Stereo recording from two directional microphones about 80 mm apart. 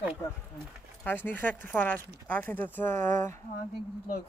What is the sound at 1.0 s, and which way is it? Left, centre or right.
Speech, left.